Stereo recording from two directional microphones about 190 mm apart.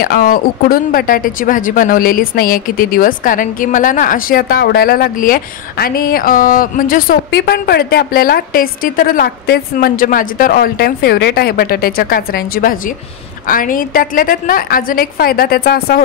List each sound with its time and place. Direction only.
0.0 s speech: 50° left (ahead or behind)